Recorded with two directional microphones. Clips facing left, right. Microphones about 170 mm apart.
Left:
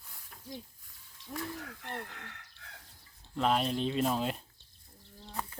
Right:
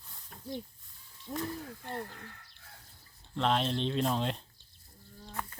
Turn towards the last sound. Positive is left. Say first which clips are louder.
# left 1 dB
turn(degrees=15)  # may be behind; listen again after turning